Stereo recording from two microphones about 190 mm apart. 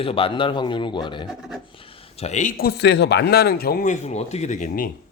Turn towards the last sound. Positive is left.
turn(degrees=40)  # may be behind; listen again after turning